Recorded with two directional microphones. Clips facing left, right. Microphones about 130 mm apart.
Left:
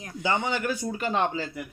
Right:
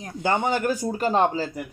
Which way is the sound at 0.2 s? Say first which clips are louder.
Right 4 dB; 50° right (ahead or behind).